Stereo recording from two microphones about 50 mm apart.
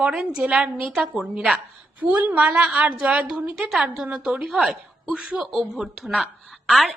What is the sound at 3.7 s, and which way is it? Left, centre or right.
A woman's voice, centre.